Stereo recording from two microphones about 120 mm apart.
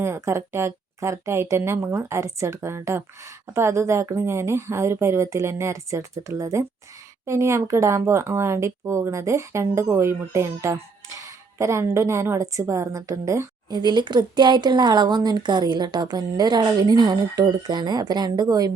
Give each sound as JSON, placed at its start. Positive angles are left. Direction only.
{"t": 0.0, "sound": "speech", "side_deg": -20}
{"t": 13.7, "sound": "speech", "side_deg": -35}